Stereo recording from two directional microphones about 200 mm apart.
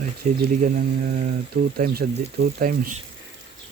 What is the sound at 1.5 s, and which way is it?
Speech, 50° right (ahead or behind).